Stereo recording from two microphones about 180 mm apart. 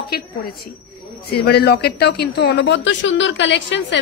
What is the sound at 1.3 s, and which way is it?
A woman's voice, 65° left (ahead or behind).